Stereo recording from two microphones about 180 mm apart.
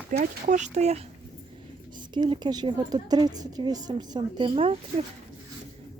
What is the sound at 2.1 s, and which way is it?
A woman's voice, 25° right (ahead or behind).